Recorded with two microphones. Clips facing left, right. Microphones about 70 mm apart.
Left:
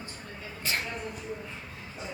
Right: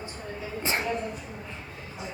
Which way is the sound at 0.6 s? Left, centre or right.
Right.